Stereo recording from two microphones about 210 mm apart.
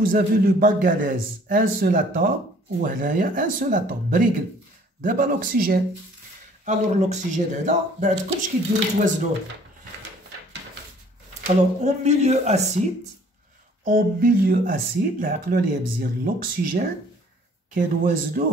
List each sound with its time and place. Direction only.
0.0 s speech: 40° right (ahead or behind)
11.4 s speech: 35° right (ahead or behind)
13.8 s speech: 40° right (ahead or behind)
17.7 s speech: 40° right (ahead or behind)